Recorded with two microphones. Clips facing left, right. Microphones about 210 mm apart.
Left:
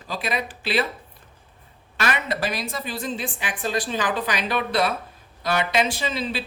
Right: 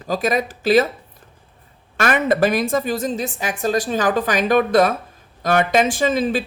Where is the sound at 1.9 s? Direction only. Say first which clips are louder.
Right 8 dB; 50° right (ahead or behind).